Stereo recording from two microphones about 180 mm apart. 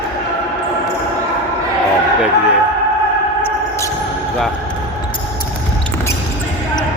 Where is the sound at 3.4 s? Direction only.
15° left (ahead or behind).